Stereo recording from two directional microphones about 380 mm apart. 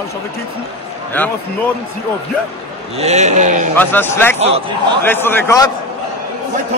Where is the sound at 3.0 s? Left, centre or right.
Centre.